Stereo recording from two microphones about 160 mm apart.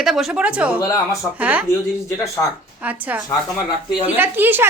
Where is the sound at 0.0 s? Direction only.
Centre (ahead or behind).